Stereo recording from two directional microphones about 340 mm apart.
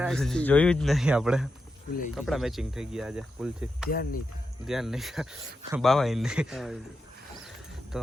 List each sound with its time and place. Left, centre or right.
0.0 s speech: centre
3.8 s speech: left
4.6 s speech: centre